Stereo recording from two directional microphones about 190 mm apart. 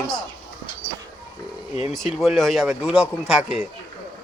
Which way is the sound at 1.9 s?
Centre (ahead or behind).